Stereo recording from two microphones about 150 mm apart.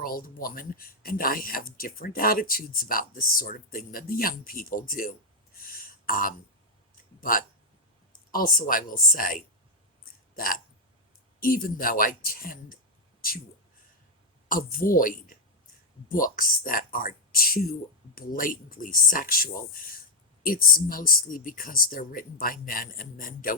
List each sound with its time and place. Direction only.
0.0 s speech: 75° left (ahead or behind)
5.6 s a sound: 75° left (ahead or behind)
7.2 s speech: 65° left (ahead or behind)
10.3 s a sound: 70° left (ahead or behind)
11.3 s speech: 70° left (ahead or behind)
14.4 s speech: 70° left (ahead or behind)